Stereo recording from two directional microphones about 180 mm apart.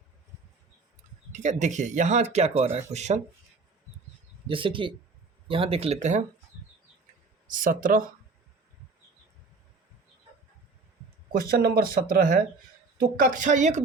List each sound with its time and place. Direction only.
1.3 s speech: 40° right (ahead or behind)
4.4 s speech: 30° right (ahead or behind)
7.4 s speech: 50° right (ahead or behind)
11.3 s speech: 55° right (ahead or behind)